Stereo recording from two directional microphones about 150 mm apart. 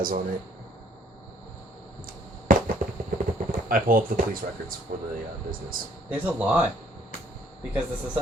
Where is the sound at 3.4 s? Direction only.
65° right (ahead or behind).